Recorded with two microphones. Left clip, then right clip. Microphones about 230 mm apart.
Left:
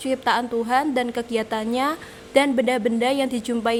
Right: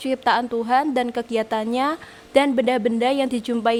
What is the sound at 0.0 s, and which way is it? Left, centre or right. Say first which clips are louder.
A woman's voice: right 2 dB; right.